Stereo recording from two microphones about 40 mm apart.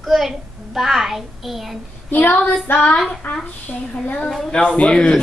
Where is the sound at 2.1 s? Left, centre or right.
Left.